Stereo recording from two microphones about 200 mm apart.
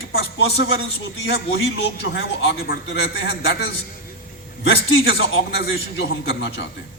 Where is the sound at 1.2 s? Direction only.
60° left (ahead or behind).